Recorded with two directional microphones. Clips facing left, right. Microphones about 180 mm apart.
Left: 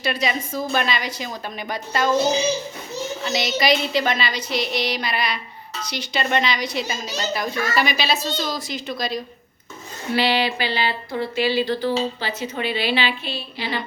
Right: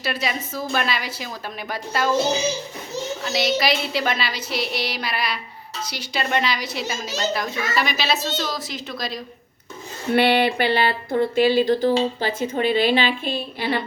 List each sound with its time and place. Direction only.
0.0 s a woman's voice: 5° right (ahead or behind)
3.2 s a woman's voice: centre (ahead or behind)
10.2 s a sound: 55° right (ahead or behind)
12.2 s a woman's voice: 50° right (ahead or behind)